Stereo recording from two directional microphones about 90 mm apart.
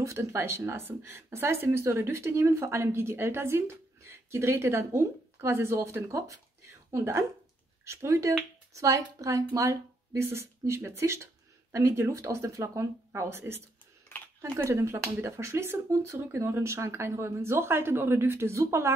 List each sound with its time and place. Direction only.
0.0 s speech: 35° right (ahead or behind)
14.6 s speech: 30° right (ahead or behind)